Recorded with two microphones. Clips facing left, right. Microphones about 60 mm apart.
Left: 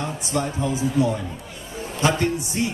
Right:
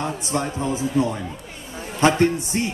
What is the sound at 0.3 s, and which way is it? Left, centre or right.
A man's voice, right.